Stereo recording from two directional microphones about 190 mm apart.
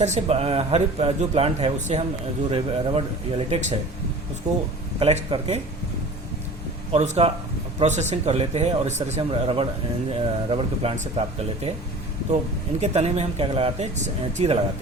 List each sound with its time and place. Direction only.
0.0 s a man's voice: 35° right (ahead or behind)
4.4 s speech: 20° right (ahead or behind)
4.9 s a man's voice: 30° right (ahead or behind)
6.9 s a man's voice: 35° right (ahead or behind)
12.8 s a man's voice: 35° right (ahead or behind)